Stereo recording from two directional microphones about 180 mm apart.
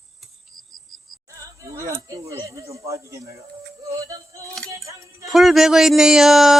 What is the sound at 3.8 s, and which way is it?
Music, 15° right (ahead or behind).